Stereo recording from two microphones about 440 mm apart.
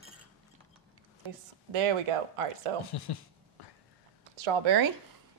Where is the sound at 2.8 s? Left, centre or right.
Left.